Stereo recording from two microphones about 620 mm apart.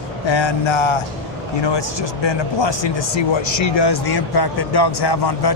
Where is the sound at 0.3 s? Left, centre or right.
Left.